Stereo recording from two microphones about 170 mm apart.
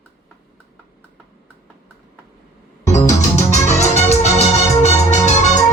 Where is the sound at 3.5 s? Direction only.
40° left (ahead or behind).